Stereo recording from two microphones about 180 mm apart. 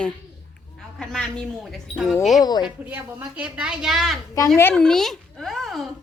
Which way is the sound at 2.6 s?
5° right (ahead or behind).